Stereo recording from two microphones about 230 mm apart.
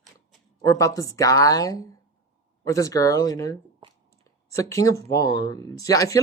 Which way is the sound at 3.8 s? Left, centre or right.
Right.